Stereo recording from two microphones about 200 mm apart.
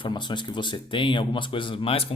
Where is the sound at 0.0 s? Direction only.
25° left (ahead or behind).